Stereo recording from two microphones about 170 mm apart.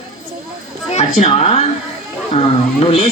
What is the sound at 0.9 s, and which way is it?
Speech, 40° left (ahead or behind).